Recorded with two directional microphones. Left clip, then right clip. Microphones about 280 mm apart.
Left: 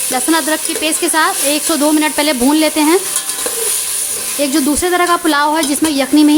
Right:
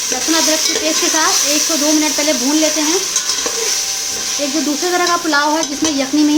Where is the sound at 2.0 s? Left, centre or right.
Left.